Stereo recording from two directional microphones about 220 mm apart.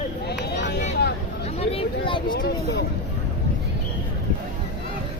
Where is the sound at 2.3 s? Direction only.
45° left (ahead or behind).